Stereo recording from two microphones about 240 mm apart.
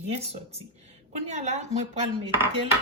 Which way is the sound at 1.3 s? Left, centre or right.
Right.